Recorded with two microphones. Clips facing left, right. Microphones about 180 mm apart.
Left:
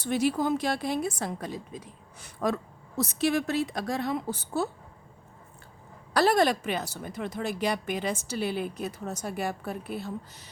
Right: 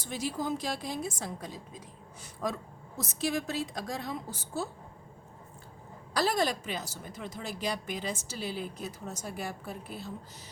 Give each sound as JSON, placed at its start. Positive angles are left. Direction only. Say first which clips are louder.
{"t": 0.0, "sound": "speech", "louder": "left 8 dB", "side_deg": 65}
{"t": 6.1, "sound": "speech", "louder": "left 6 dB", "side_deg": 65}